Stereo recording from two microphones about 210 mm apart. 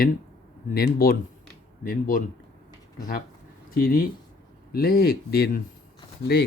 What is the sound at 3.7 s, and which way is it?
Speech, 45° left (ahead or behind).